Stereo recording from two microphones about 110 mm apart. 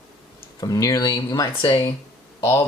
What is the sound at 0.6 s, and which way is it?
Speech, 30° left (ahead or behind).